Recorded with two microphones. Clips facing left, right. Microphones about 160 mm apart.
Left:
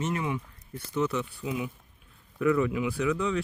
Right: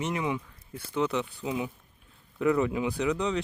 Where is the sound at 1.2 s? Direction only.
25° right (ahead or behind).